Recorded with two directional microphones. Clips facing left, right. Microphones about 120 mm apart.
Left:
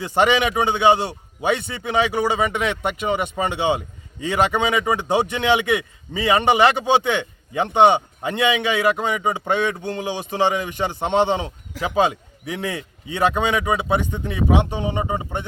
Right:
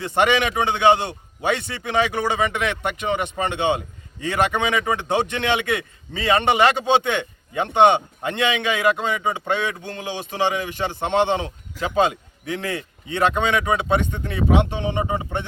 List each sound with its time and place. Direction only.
0.0 s a man's voice: 15° left (ahead or behind)
11.7 s speech: 90° left
12.5 s a man's voice: 15° left (ahead or behind)